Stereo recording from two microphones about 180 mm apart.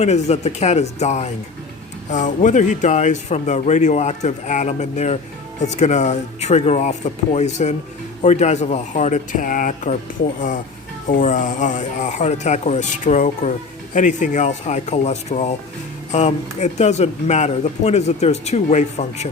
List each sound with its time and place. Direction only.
0.0 s speech: 40° left (ahead or behind)
11.1 s speech: 45° left (ahead or behind)